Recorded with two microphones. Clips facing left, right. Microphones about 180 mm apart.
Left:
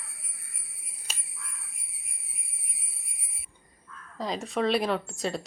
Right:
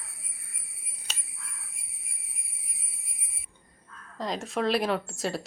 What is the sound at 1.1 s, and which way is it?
Whispering, 10° left (ahead or behind).